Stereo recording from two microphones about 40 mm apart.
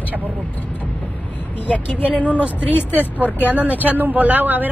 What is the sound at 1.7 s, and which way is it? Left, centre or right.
Speech, left.